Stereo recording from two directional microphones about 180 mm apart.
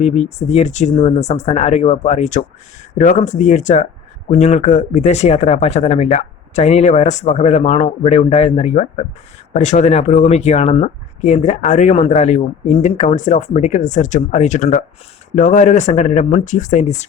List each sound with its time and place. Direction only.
0.0 s speech: 35° left (ahead or behind)